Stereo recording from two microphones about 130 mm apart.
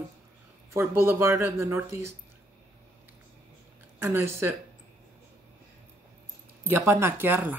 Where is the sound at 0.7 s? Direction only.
20° right (ahead or behind).